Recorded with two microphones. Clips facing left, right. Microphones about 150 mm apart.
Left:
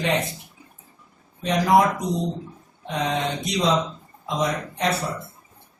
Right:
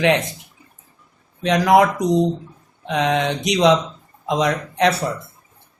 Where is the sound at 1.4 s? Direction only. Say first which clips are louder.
Right 4 dB; 85° right.